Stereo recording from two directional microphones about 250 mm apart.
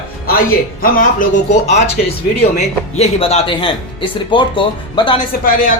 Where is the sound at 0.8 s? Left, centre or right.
Left.